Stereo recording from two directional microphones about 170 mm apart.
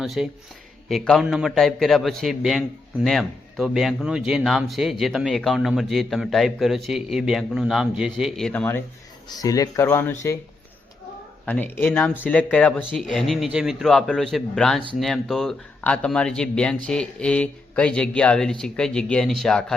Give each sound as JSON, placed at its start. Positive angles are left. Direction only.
{"t": 0.0, "sound": "a man's voice", "side_deg": 0}
{"t": 9.3, "sound": "speech", "side_deg": 20}
{"t": 11.4, "sound": "a man's voice", "side_deg": 10}